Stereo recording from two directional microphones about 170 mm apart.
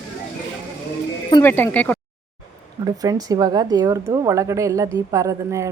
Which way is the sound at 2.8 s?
20° right (ahead or behind).